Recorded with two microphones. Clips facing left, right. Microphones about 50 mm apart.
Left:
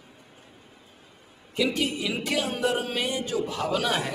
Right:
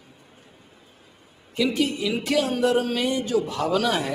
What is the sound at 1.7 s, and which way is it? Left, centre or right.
Speech, centre.